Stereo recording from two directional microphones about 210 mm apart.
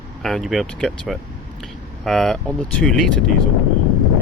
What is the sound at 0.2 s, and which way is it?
Speech, centre (ahead or behind).